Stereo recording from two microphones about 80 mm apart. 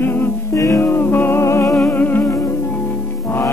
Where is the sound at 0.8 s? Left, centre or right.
Left.